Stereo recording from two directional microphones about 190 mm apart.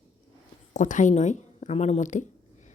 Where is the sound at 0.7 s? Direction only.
40° left (ahead or behind).